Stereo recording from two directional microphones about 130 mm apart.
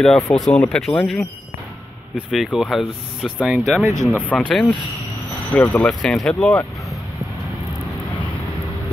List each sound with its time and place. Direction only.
0.0 s speech: 5° left (ahead or behind)
3.8 s speech: 25° right (ahead or behind)
4.4 s speech: centre (ahead or behind)
5.5 s speech: 15° left (ahead or behind)
5.9 s speech: 5° left (ahead or behind)